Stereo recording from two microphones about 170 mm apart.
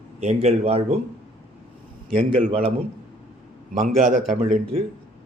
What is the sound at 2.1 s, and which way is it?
Speech, 30° right (ahead or behind).